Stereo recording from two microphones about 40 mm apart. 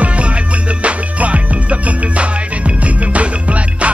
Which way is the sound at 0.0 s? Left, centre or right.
Right.